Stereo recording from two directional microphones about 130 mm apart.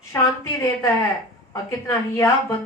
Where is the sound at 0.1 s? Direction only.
20° left (ahead or behind).